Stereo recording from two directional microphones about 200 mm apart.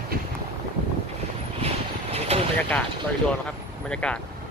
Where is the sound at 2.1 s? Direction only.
30° right (ahead or behind).